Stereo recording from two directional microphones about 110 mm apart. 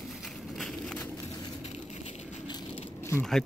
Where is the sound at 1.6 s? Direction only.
90° left.